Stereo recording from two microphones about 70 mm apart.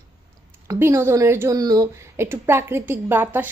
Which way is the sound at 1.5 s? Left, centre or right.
Right.